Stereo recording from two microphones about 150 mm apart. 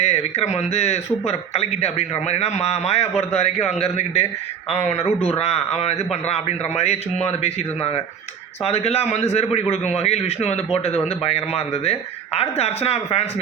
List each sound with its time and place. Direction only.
0.0 s a man's voice: 45° left (ahead or behind)